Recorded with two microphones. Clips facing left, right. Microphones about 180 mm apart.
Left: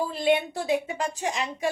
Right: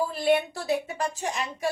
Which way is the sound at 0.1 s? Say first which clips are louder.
Even; 20° left (ahead or behind).